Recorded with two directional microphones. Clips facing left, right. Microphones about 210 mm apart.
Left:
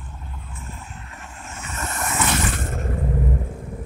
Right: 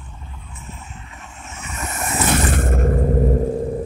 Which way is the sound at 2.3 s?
55° right (ahead or behind).